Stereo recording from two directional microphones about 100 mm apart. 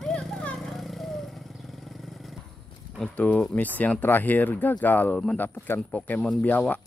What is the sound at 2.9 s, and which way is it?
Speech, 10° left (ahead or behind).